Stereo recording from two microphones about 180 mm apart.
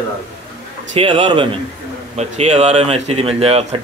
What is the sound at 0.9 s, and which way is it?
Speech, 30° right (ahead or behind).